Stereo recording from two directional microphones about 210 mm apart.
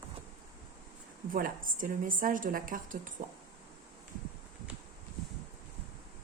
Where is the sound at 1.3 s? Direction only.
40° right (ahead or behind).